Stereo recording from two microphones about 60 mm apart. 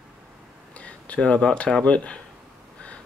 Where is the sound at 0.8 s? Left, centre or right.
Left.